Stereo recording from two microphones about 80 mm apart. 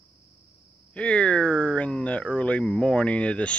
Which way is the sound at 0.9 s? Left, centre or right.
Centre.